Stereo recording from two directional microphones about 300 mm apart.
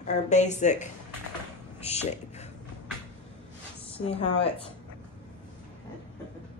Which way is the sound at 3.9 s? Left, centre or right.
Centre.